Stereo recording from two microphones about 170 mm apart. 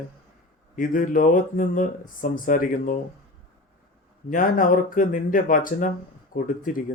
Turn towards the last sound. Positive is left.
turn(degrees=50)  # may be behind; listen again after turning